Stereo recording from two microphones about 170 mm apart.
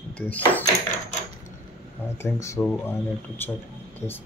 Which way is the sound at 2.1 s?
15° left (ahead or behind).